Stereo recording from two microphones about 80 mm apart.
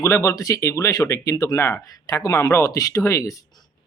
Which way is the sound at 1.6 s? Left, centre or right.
Left.